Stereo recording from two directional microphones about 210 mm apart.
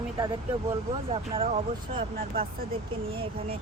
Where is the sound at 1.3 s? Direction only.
25° right (ahead or behind).